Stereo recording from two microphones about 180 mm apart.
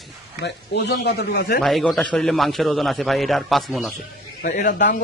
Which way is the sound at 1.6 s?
Centre (ahead or behind).